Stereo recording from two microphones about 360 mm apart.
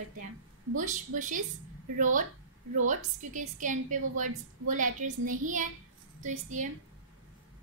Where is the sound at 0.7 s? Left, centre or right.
Right.